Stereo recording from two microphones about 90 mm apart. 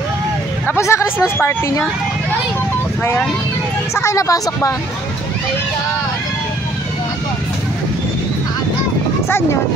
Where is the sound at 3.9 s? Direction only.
35° left (ahead or behind).